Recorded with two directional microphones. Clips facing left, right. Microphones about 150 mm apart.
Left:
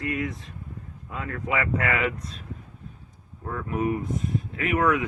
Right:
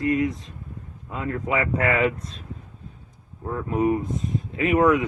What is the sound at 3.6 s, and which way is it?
Speech, 25° right (ahead or behind).